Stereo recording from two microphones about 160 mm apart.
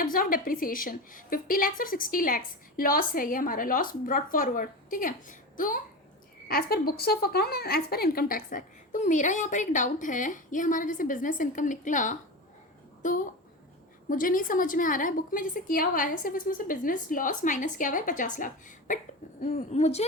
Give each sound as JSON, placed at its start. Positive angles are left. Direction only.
{"t": 0.0, "sound": "a woman's voice", "side_deg": 60}
{"t": 6.5, "sound": "a woman's voice", "side_deg": 75}